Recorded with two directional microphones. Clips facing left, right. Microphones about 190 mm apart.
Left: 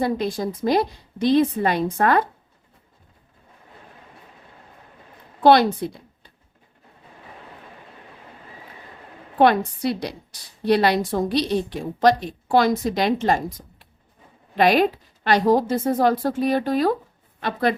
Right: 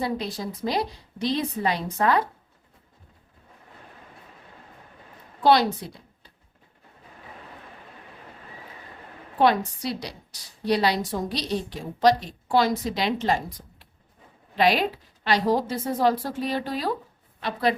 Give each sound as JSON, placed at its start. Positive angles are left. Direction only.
{"t": 0.0, "sound": "a woman's voice", "side_deg": 50}
{"t": 5.4, "sound": "a woman's voice", "side_deg": 55}
{"t": 9.4, "sound": "a woman's voice", "side_deg": 55}